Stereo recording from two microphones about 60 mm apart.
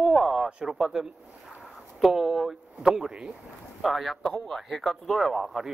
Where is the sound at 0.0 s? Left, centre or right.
Centre.